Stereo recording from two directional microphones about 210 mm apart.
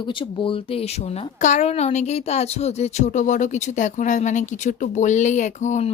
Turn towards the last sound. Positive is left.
turn(degrees=35)  # may be behind; listen again after turning